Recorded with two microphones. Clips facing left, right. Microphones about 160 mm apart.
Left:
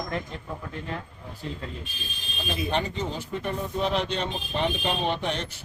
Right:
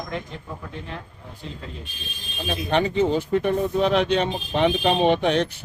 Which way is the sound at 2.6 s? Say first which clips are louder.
Right 9 dB; 60° right (ahead or behind).